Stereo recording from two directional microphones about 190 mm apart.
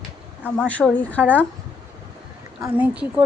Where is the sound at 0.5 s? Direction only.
5° left (ahead or behind).